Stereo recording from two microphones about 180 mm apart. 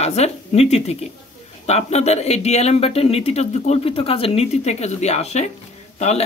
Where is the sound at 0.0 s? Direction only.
35° left (ahead or behind).